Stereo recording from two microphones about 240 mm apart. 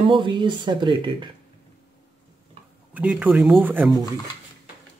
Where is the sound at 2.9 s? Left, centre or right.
Centre.